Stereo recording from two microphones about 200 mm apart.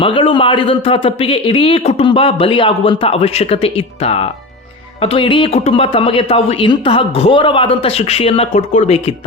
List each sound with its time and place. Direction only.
0.0 s a man's voice: 25° left (ahead or behind)